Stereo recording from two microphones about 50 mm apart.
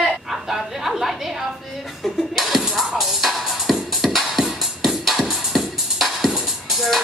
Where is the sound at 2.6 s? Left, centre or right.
Centre.